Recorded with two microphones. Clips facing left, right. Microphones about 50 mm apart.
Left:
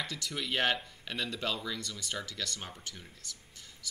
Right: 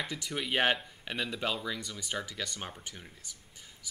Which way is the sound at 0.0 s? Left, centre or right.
Centre.